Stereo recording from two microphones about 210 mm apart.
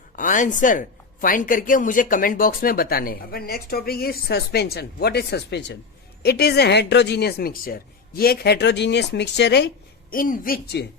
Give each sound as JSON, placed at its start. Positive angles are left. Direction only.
{"t": 0.2, "sound": "a woman's voice", "side_deg": 40}
{"t": 10.1, "sound": "a woman's voice", "side_deg": 40}